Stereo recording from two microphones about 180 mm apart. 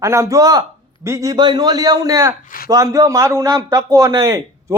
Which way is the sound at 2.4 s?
50° left (ahead or behind).